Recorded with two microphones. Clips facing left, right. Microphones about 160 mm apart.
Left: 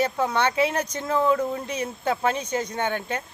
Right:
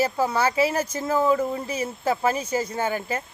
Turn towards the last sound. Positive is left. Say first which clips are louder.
# right 1 dB
turn(degrees=-5)  # may be behind; listen again after turning